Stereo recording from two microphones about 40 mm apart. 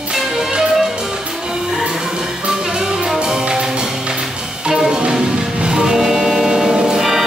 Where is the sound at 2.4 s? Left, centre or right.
Centre.